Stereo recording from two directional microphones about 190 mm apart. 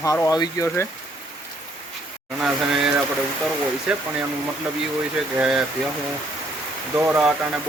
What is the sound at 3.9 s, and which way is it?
Speech, 5° right (ahead or behind).